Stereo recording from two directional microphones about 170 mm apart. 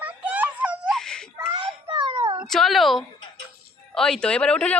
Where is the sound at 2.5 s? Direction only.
Centre (ahead or behind).